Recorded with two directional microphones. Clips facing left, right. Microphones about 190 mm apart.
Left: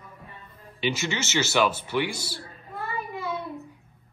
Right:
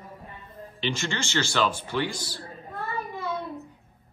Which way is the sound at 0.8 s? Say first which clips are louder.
Left 2 dB; 5° left (ahead or behind).